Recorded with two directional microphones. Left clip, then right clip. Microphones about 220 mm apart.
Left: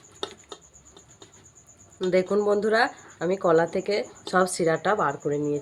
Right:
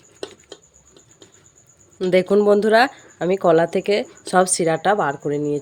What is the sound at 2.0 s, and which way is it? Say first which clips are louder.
Speech: right 7 dB; 45° right (ahead or behind).